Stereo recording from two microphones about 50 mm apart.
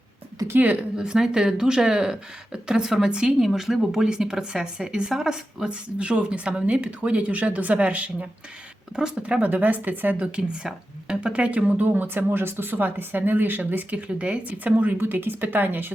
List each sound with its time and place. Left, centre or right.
0.6 s speech: right
0.9 s speech: centre
3.4 s speech: centre
6.0 s speech: right
10.2 s speech: centre
11.9 s speech: right
14.1 s speech: right